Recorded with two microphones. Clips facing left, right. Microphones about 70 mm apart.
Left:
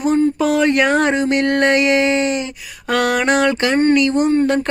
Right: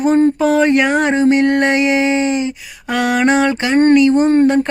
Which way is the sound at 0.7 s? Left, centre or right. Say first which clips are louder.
Right 1 dB; centre.